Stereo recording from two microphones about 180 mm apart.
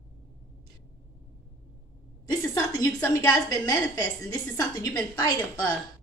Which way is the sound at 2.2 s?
20° left (ahead or behind).